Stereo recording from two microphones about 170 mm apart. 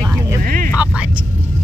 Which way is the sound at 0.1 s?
15° right (ahead or behind).